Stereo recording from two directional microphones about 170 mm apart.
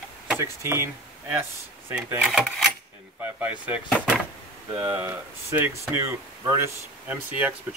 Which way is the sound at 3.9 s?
5° left (ahead or behind).